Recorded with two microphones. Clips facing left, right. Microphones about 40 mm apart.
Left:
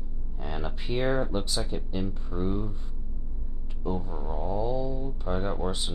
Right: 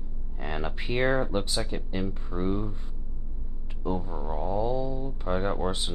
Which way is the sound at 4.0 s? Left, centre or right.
Centre.